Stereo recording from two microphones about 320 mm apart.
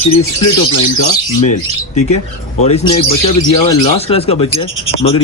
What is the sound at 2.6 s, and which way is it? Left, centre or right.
Speech, centre.